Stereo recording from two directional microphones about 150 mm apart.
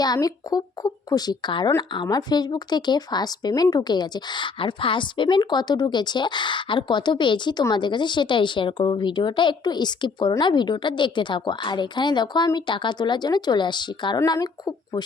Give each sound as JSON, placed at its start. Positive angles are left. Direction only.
{"t": 0.0, "sound": "a woman's voice", "side_deg": 25}